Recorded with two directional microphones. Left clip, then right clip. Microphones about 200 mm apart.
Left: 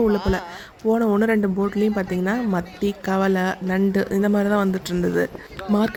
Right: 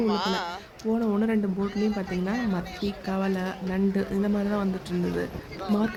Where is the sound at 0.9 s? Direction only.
30° left (ahead or behind).